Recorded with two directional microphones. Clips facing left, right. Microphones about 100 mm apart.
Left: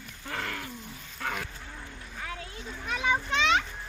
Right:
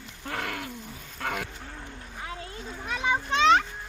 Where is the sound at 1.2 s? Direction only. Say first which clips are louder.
Right 2 dB; 10° right (ahead or behind).